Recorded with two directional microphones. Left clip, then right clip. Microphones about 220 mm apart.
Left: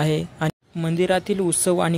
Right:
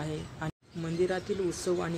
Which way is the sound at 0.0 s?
35° left (ahead or behind).